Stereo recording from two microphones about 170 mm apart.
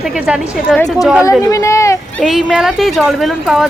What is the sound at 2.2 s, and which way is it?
A woman's voice, 5° right (ahead or behind).